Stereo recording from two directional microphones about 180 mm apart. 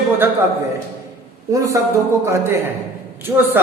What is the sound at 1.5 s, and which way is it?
Speech, 20° right (ahead or behind).